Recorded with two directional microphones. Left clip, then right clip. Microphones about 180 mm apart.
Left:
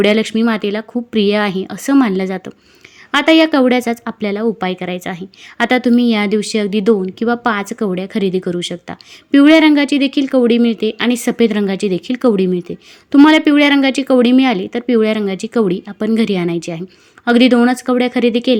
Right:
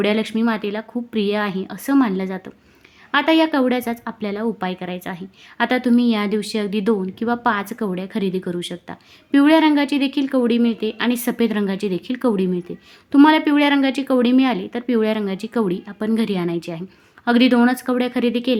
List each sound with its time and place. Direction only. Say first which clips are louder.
0.0 s a woman's voice: left 6 dB; 25° left (ahead or behind)